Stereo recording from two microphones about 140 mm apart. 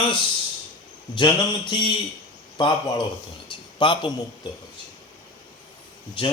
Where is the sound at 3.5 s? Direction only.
35° left (ahead or behind).